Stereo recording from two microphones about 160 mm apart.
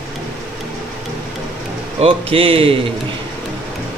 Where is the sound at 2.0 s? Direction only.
35° right (ahead or behind).